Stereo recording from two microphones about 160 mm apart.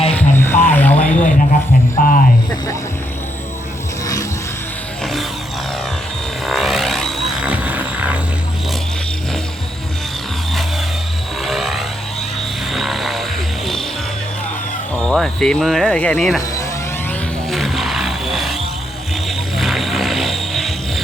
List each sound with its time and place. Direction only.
0.1 s vehicle: 10° left (ahead or behind)
1.1 s a sound: 55° left (ahead or behind)
4.0 s a sound: 20° left (ahead or behind)
6.4 s vehicle: centre (ahead or behind)
11.4 s vehicle: centre (ahead or behind)
15.0 s speech: 5° left (ahead or behind)
17.5 s vehicle: centre (ahead or behind)